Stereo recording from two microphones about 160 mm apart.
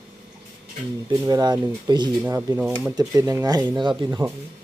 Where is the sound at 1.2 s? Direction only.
25° right (ahead or behind).